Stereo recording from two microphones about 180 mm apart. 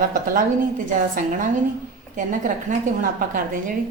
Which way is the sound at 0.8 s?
45° right (ahead or behind).